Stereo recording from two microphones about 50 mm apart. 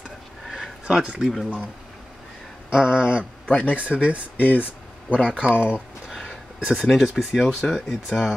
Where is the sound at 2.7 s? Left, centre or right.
Centre.